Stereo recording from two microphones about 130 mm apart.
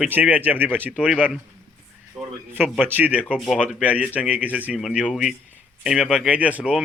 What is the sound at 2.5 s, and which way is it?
Speech, 15° right (ahead or behind).